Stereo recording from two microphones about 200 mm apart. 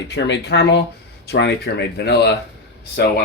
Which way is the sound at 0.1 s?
60° left (ahead or behind).